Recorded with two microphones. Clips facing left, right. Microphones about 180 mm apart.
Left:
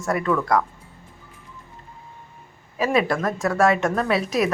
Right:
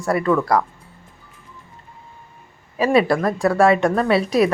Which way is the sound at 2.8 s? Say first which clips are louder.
Right 4 dB; centre (ahead or behind).